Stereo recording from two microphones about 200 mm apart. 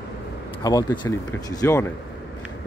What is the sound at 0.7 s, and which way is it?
Speech, 20° left (ahead or behind).